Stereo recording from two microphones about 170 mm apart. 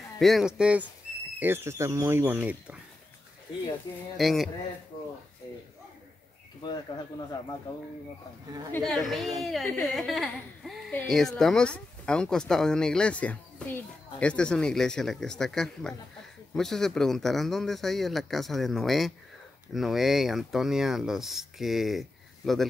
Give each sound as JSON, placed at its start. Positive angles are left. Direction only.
{"t": 0.2, "sound": "speech", "side_deg": 0}
{"t": 4.2, "sound": "speech", "side_deg": 0}
{"t": 6.9, "sound": "speech", "side_deg": 25}
{"t": 8.7, "sound": "speech", "side_deg": 0}